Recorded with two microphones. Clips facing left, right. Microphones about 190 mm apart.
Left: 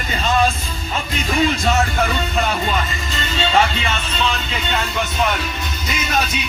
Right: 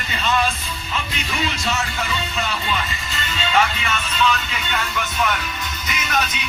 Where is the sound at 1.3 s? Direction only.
50° left (ahead or behind); by 4.8 s 30° left (ahead or behind).